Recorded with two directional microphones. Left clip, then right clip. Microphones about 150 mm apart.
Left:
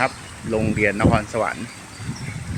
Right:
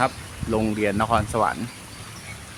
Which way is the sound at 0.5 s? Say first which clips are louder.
Left 3 dB; 20° right (ahead or behind).